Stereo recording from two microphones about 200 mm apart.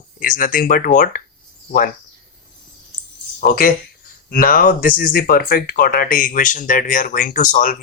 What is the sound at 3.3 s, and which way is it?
Speech, 45° left (ahead or behind).